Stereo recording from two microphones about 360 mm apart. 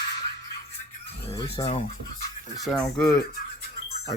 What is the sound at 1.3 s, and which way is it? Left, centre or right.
Chicken, centre.